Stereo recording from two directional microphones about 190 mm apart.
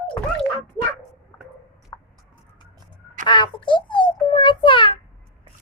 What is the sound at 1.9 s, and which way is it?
Clip-clop, 15° left (ahead or behind).